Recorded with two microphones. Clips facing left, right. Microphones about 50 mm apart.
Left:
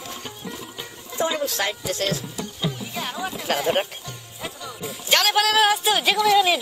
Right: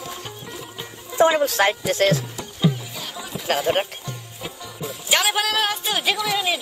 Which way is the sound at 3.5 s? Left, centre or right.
Centre.